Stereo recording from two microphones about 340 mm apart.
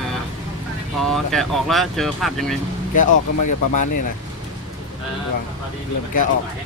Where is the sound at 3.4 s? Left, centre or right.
Left.